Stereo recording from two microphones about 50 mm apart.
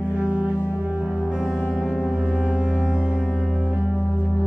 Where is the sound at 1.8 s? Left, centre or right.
Centre.